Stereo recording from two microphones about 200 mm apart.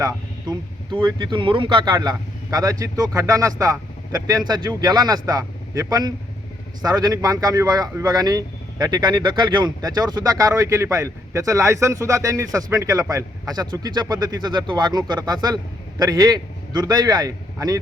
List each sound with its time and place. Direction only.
0.0 s a man's voice: 20° right (ahead or behind)